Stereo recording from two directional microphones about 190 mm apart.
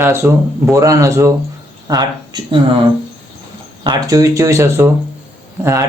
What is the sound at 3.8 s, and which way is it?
A man's voice, 15° right (ahead or behind).